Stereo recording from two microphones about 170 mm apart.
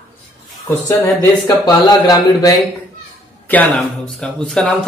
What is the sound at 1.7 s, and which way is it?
Speech, 20° left (ahead or behind).